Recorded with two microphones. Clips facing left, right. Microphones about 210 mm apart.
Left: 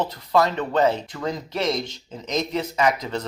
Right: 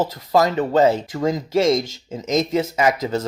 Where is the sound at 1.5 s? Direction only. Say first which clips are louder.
Right 8 dB; 90° right.